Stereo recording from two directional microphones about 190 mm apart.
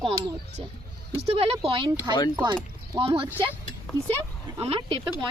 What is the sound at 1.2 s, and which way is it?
Speech, 30° right (ahead or behind).